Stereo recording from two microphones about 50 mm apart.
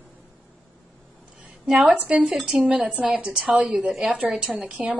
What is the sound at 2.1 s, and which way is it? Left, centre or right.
Speech, right.